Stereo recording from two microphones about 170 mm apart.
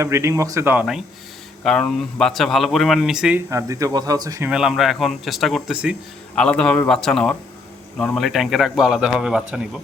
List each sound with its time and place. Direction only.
0.0 s speech: 15° right (ahead or behind)
3.5 s speech: 20° right (ahead or behind)
4.4 s speech: 5° right (ahead or behind)
6.3 s speech: 5° left (ahead or behind)